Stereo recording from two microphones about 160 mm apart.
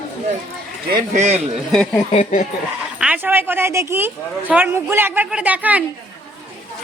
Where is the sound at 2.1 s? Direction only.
50° left (ahead or behind).